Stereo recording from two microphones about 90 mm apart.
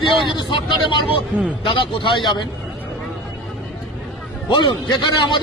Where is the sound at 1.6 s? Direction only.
75° left (ahead or behind); by 2.5 s 60° left (ahead or behind).